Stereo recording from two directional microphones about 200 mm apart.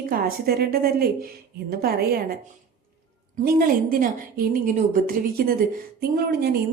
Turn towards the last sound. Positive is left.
turn(degrees=-50)  # may be behind; listen again after turning